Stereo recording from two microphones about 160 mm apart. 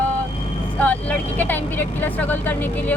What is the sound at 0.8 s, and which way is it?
Speech, 10° left (ahead or behind).